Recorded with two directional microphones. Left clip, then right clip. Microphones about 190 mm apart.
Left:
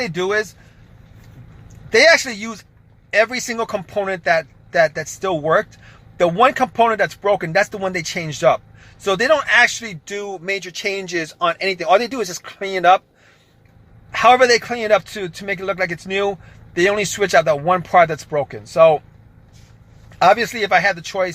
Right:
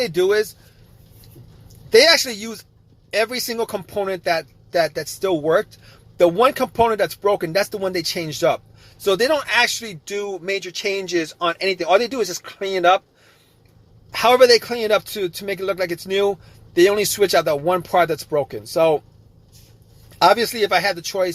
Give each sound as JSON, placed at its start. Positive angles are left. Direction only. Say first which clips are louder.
{"t": 0.1, "sound": "speech", "louder": "right 3 dB", "side_deg": -10}
{"t": 1.9, "sound": "speech", "louder": "left 1 dB", "side_deg": -10}
{"t": 14.1, "sound": "speech", "louder": "left 1 dB", "side_deg": -5}
{"t": 20.2, "sound": "speech", "louder": "left 1 dB", "side_deg": -10}